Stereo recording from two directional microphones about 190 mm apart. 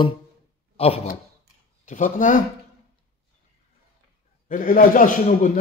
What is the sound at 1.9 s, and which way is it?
Speech, 40° left (ahead or behind).